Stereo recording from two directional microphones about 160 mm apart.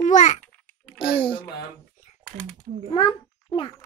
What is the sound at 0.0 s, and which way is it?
Babbling, 50° left (ahead or behind).